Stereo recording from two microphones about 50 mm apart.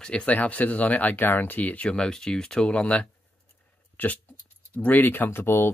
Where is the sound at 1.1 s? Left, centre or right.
Left.